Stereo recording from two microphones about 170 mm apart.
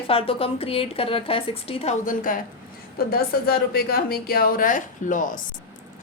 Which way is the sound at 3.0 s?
65° left (ahead or behind).